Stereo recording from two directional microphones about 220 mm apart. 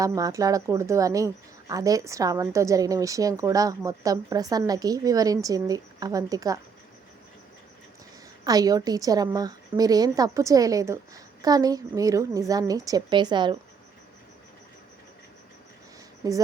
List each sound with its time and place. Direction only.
0.0 s speech: 15° right (ahead or behind)
8.4 s speech: 15° right (ahead or behind)
16.2 s speech: 15° right (ahead or behind)